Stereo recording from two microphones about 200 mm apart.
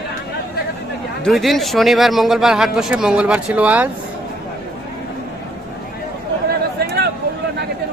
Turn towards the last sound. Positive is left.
turn(degrees=-50)  # may be behind; listen again after turning